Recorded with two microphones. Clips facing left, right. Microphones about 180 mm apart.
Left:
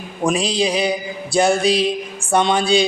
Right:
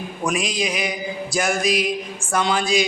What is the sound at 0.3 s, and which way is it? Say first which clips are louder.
A man's voice: left 5 dB; 30° left (ahead or behind).